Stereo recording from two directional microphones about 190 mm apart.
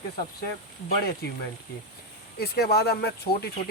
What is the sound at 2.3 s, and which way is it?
Speech, 55° left (ahead or behind).